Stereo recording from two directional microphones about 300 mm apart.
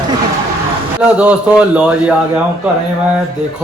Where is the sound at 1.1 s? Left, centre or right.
Centre.